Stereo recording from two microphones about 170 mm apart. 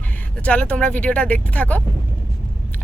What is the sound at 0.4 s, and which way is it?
Speech, 5° left (ahead or behind).